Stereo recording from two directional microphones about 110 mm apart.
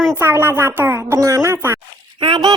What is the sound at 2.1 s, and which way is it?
Speech, 45° right (ahead or behind).